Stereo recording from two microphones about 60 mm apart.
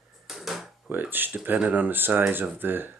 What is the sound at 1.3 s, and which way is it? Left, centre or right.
Speech, right.